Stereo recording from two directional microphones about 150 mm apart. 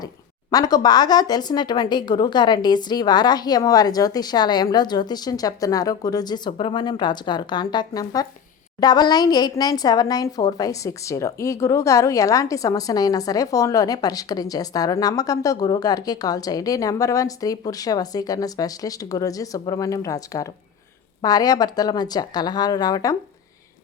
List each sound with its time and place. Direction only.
0.5 s a woman's voice: 25° left (ahead or behind)